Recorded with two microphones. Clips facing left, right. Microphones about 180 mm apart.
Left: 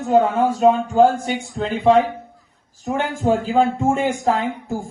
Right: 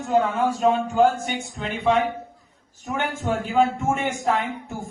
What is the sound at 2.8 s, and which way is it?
A man's voice, 35° left (ahead or behind).